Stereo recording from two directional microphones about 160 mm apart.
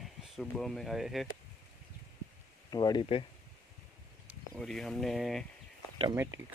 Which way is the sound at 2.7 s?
25° left (ahead or behind).